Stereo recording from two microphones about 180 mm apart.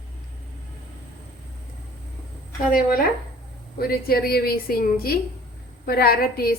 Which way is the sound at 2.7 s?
55° left (ahead or behind).